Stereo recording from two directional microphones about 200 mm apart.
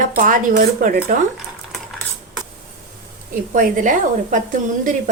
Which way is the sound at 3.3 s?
40° right (ahead or behind).